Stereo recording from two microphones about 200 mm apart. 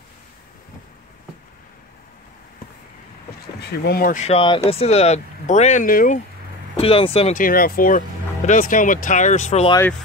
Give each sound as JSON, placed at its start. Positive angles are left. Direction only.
{"t": 3.7, "sound": "speech", "side_deg": 50}
{"t": 6.8, "sound": "speech", "side_deg": 30}
{"t": 7.4, "sound": "speech", "side_deg": 45}
{"t": 9.7, "sound": "speech", "side_deg": 15}